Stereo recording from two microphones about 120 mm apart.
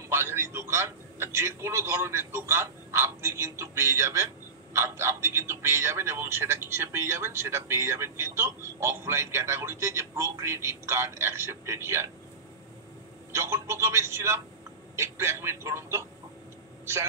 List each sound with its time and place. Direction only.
0.1 s a man's voice: 20° right (ahead or behind)
13.3 s a man's voice: 20° right (ahead or behind)